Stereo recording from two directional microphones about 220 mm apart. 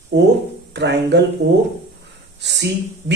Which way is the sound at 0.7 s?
50° right (ahead or behind).